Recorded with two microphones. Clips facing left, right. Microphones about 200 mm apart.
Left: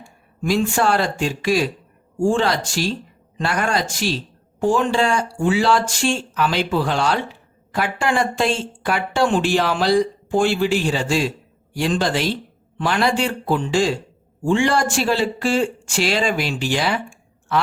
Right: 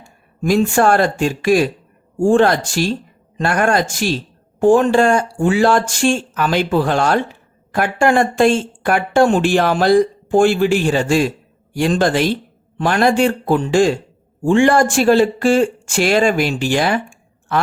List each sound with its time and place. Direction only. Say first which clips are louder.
0.4 s speech: right 5 dB; 50° right (ahead or behind)